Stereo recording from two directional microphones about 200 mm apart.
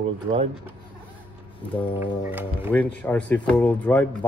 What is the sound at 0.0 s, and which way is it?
Speech, 25° right (ahead or behind).